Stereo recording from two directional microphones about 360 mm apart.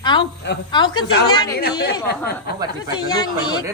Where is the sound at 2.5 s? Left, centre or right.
Left.